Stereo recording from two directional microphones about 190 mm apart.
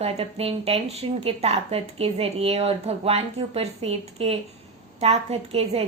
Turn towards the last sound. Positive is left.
turn(degrees=-30)  # may be behind; listen again after turning